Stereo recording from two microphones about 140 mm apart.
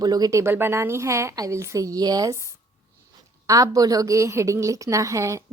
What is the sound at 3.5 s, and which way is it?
A woman's voice, 25° right (ahead or behind).